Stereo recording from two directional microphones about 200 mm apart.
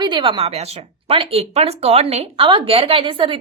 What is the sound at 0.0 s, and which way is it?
Speech, 25° right (ahead or behind).